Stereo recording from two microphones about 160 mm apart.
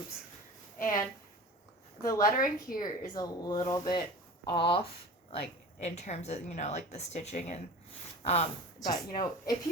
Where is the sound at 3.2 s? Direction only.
25° left (ahead or behind); by 7.6 s 45° left (ahead or behind).